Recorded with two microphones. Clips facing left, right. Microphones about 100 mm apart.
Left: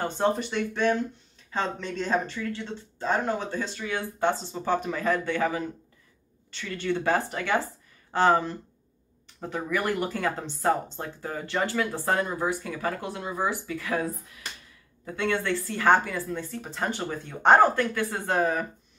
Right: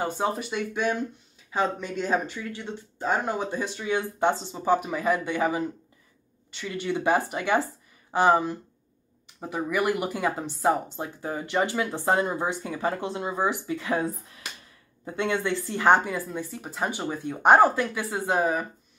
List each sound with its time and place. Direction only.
0.0 s speech: 5° right (ahead or behind)